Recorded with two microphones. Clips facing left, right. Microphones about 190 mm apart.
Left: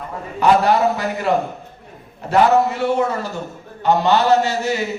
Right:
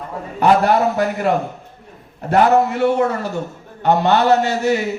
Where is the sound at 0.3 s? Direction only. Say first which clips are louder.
Right 1 dB; 50° right (ahead or behind).